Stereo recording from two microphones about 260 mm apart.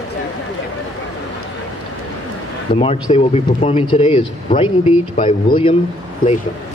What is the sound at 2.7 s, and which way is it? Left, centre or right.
Speech, left.